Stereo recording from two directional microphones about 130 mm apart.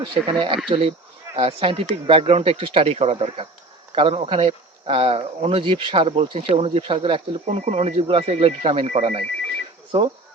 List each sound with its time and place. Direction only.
0.0 s speech: 40° right (ahead or behind)
7.4 s speech: 65° right (ahead or behind)